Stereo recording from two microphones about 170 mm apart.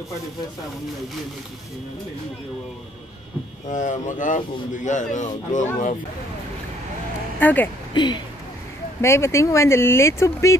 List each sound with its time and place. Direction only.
3.6 s a man's voice: 45° left (ahead or behind)
7.3 s speech: 10° left (ahead or behind)
7.9 s speech: 25° left (ahead or behind)
9.0 s speech: 15° left (ahead or behind)